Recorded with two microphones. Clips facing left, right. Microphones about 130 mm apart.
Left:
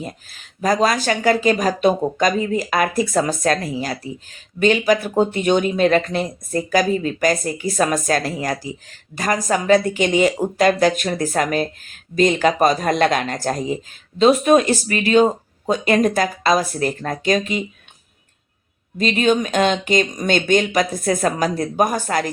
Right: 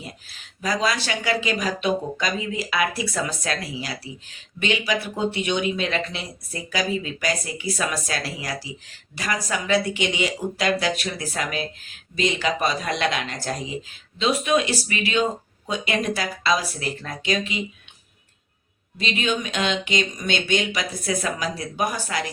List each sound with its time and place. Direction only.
0.0 s speech: 45° left (ahead or behind)
18.9 s speech: 45° left (ahead or behind)